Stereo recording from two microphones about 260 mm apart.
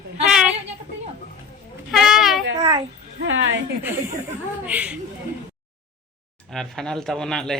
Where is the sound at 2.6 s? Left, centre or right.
Centre.